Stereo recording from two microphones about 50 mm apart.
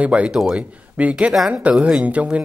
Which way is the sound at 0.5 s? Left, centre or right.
Right.